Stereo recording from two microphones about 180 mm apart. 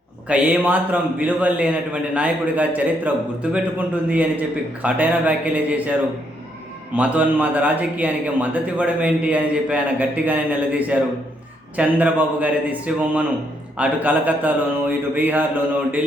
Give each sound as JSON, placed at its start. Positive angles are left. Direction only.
{"t": 0.3, "sound": "a man's voice", "side_deg": -5}
{"t": 4.1, "sound": "a man's voice", "side_deg": -10}
{"t": 6.9, "sound": "a man's voice", "side_deg": -5}